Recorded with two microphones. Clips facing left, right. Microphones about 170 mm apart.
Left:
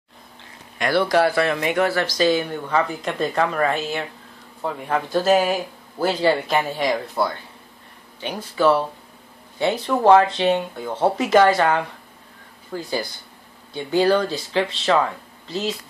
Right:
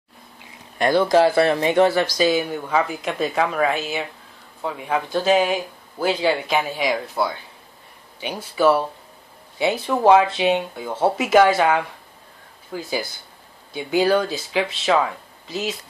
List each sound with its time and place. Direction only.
0.9 s a man's voice: 20° right (ahead or behind)